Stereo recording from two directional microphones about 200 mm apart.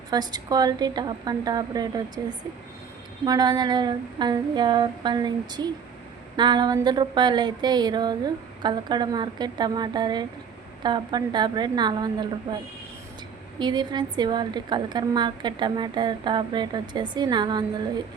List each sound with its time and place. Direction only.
0.1 s a woman's voice: 20° right (ahead or behind)
13.6 s a woman's voice: 20° right (ahead or behind)